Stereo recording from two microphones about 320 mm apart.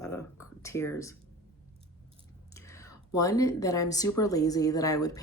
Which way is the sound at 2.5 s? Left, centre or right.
Centre.